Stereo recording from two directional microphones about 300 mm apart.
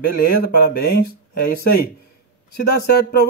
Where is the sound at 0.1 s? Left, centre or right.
Left.